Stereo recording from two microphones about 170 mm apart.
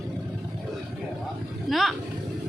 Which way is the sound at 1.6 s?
Centre (ahead or behind).